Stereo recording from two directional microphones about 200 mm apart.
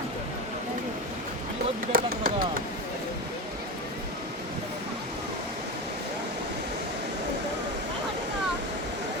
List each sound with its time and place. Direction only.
1.9 s speech: 45° right (ahead or behind)